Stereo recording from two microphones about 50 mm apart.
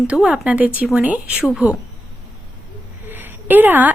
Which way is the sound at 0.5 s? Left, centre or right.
Right.